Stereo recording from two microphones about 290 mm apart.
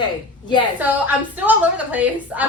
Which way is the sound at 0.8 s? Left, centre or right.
Centre.